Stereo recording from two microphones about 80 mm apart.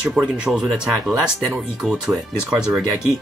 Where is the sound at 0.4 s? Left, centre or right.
Centre.